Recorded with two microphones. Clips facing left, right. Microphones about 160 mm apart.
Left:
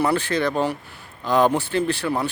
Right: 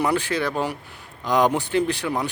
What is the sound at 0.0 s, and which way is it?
Speech, 15° right (ahead or behind).